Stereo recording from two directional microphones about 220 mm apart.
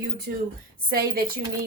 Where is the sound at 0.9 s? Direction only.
45° right (ahead or behind).